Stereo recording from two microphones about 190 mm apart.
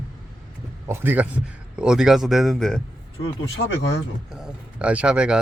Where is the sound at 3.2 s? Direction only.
70° left (ahead or behind).